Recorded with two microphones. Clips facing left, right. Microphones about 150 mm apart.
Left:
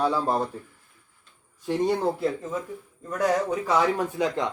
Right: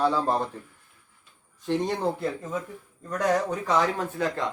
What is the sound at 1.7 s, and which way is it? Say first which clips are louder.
Speech: left 2 dB; 5° left (ahead or behind).